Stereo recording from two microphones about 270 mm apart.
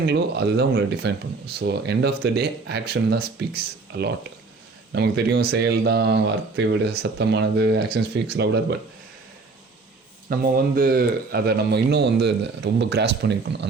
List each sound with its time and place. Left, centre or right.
0.0 s speech: right
10.2 s speech: right